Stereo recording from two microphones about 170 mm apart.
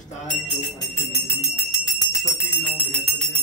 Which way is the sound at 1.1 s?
15° left (ahead or behind).